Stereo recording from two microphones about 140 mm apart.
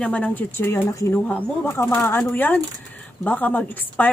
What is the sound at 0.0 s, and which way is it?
Speech, 10° left (ahead or behind).